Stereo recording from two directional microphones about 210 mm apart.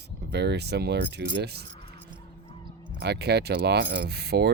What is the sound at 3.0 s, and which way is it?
Speech, 50° right (ahead or behind).